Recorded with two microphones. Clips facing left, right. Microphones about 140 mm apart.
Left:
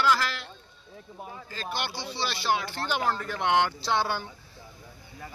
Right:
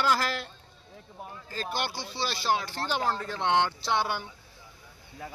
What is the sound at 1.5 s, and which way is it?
A man's voice, 45° right (ahead or behind).